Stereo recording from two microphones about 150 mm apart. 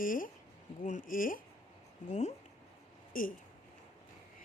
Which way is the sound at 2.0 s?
50° left (ahead or behind).